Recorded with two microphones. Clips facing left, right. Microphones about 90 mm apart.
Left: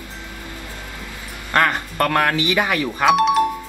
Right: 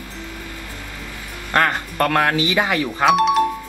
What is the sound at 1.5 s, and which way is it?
Speech, 20° right (ahead or behind).